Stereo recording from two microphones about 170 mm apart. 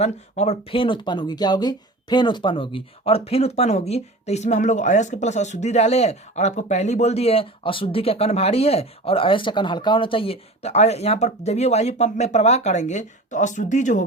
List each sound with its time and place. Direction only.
0.0 s speech: 40° left (ahead or behind)